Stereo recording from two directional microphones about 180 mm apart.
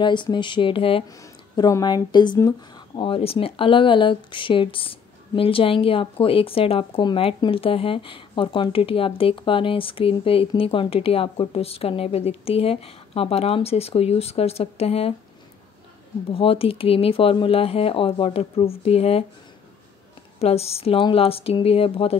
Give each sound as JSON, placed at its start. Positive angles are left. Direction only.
{"t": 0.0, "sound": "speech", "side_deg": 25}
{"t": 1.0, "sound": "speech", "side_deg": 20}
{"t": 16.3, "sound": "speech", "side_deg": 30}
{"t": 20.3, "sound": "speech", "side_deg": 35}